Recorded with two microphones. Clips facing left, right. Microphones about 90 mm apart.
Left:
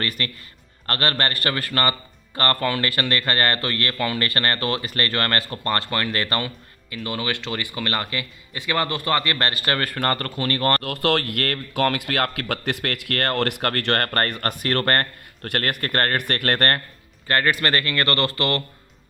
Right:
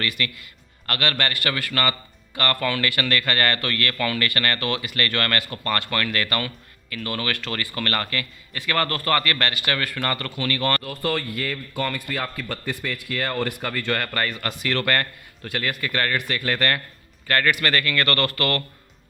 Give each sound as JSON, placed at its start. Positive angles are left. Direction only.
{"t": 0.0, "sound": "a man's voice", "side_deg": 35}
{"t": 10.8, "sound": "speech", "side_deg": 75}
{"t": 15.4, "sound": "speech", "side_deg": 60}
{"t": 17.2, "sound": "speech", "side_deg": 30}